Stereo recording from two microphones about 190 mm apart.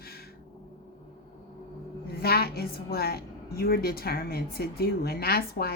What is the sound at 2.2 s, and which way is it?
A woman's voice, 55° left (ahead or behind).